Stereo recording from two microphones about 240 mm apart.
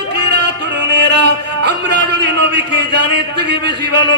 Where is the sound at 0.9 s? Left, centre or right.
Right.